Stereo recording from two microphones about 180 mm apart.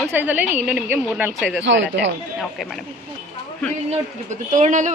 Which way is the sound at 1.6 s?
90° right.